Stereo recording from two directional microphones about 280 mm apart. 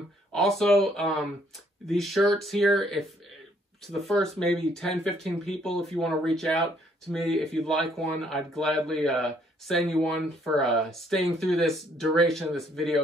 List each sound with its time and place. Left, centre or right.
0.3 s speech: centre
3.8 s speech: centre